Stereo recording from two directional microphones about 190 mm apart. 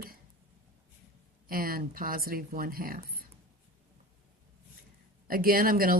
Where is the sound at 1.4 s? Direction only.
50° right (ahead or behind).